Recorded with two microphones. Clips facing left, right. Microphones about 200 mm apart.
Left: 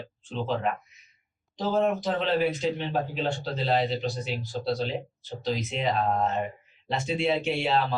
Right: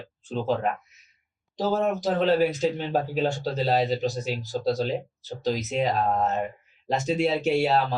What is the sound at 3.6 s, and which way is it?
Speech, 40° right (ahead or behind).